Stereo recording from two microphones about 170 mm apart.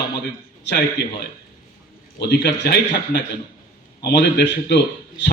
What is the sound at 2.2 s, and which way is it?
A man's voice, 80° left.